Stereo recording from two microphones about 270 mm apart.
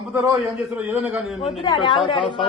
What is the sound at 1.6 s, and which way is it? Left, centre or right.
Speech, centre.